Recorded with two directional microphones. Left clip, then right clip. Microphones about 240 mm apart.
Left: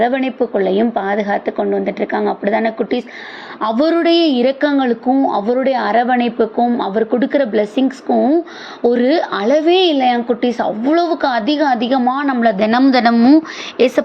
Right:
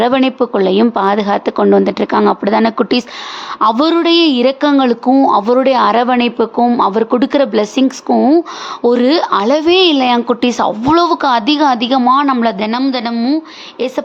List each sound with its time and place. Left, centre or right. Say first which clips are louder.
0.0 s speech: right 4 dB; right
12.5 s a woman's voice: left 3 dB; centre